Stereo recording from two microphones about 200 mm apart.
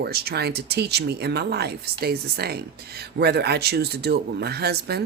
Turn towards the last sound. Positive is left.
turn(degrees=-55)  # may be behind; listen again after turning